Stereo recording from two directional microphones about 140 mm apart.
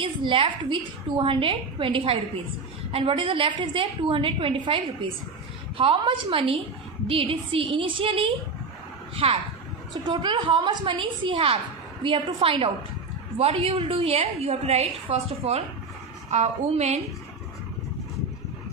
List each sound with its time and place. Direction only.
0.0 s a woman's voice: 40° right (ahead or behind)
5.8 s a woman's voice: 40° right (ahead or behind)